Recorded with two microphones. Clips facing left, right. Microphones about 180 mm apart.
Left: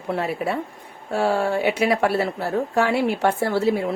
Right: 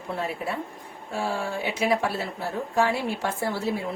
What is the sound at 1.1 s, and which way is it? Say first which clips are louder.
A woman's voice: left 8 dB; 70° left (ahead or behind).